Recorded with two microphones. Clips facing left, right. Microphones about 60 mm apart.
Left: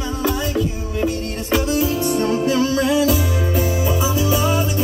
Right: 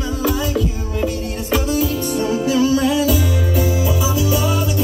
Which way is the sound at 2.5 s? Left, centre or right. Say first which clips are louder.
Right 2 dB; left.